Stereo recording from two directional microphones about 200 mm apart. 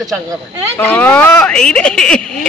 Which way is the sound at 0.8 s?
5° left (ahead or behind).